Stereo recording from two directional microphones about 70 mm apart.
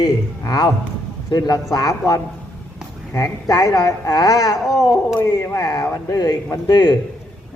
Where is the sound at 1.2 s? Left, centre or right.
Left.